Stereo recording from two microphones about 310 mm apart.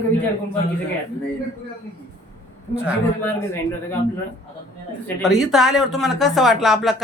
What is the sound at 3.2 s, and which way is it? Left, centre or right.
Speech, centre.